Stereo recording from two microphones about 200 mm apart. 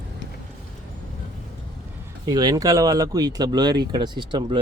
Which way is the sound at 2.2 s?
20° right (ahead or behind).